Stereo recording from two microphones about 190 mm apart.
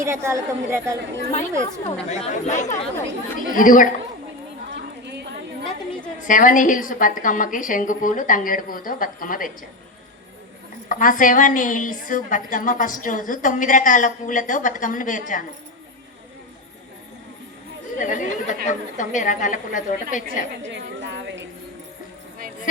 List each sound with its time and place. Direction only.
0.0 s a woman's voice: 15° right (ahead or behind)
1.3 s a woman's voice: 35° left (ahead or behind)
6.2 s a woman's voice: 45° left (ahead or behind)
10.8 s a woman's voice: 45° left (ahead or behind)
18.0 s a woman's voice: 40° left (ahead or behind)
20.6 s a woman's voice: 70° right (ahead or behind)